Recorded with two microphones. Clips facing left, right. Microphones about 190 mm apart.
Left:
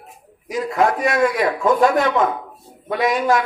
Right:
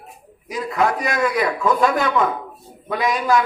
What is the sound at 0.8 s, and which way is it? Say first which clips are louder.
A man's voice: left 3 dB; 45° left (ahead or behind).